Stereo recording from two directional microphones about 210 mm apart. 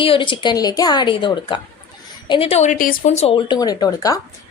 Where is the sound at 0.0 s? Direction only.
25° left (ahead or behind).